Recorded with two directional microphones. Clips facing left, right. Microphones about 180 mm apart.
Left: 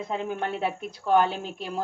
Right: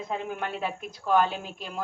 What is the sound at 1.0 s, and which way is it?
Speech, 30° left (ahead or behind).